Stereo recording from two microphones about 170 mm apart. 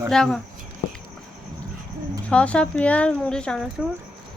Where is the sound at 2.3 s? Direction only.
5° left (ahead or behind).